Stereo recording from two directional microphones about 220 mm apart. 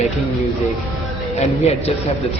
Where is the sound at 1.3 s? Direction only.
30° left (ahead or behind).